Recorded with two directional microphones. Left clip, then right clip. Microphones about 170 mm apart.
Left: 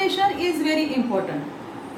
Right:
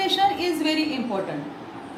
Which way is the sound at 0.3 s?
20° right (ahead or behind).